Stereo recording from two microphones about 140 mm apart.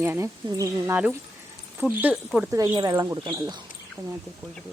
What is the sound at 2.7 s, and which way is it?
Speech, 30° right (ahead or behind).